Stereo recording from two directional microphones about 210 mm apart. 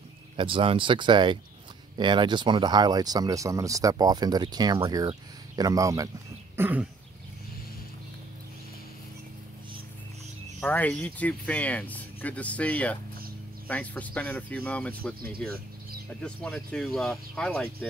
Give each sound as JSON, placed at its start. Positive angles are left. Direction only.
{"t": 0.4, "sound": "speech", "side_deg": -25}
{"t": 6.5, "sound": "a sound", "side_deg": -10}
{"t": 10.6, "sound": "speech", "side_deg": 5}